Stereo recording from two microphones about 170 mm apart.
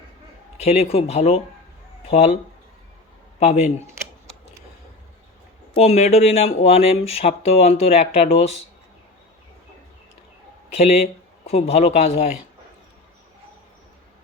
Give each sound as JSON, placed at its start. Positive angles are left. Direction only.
{"t": 0.5, "sound": "speech", "side_deg": 40}
{"t": 3.4, "sound": "speech", "side_deg": 45}
{"t": 5.8, "sound": "speech", "side_deg": 35}
{"t": 10.8, "sound": "a man's voice", "side_deg": 35}